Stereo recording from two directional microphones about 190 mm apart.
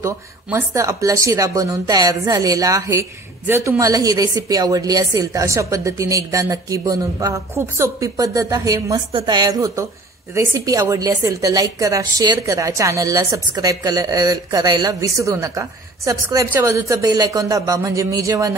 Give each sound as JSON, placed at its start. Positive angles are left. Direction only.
{"t": 0.0, "sound": "speech", "side_deg": -15}